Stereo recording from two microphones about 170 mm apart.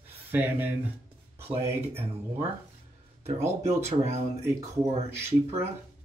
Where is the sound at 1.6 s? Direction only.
35° right (ahead or behind).